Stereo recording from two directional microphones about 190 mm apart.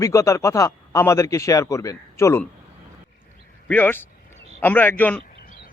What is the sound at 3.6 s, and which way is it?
A man's voice, 10° left (ahead or behind).